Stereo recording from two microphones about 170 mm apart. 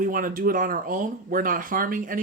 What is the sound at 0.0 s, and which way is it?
Speech, 55° right (ahead or behind).